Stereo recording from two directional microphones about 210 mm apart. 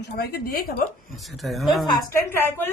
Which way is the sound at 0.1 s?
50° left (ahead or behind).